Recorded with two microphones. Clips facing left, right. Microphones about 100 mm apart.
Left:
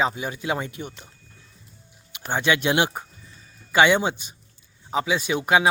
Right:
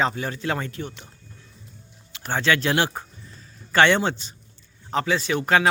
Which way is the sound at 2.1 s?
15° left (ahead or behind).